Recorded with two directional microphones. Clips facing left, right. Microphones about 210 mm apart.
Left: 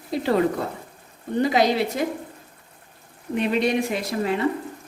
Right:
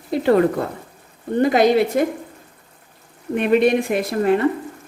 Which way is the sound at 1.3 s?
50° right (ahead or behind).